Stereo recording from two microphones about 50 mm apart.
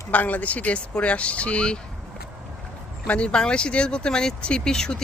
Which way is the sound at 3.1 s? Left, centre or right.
Left.